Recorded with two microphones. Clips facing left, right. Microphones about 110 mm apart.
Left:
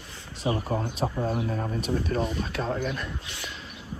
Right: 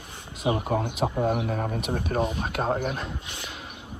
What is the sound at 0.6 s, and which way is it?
Speech, 65° right (ahead or behind).